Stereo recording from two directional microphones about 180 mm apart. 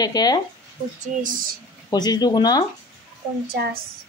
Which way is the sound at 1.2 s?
50° right (ahead or behind).